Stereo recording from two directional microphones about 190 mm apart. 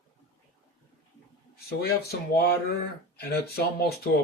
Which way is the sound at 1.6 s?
55° left (ahead or behind).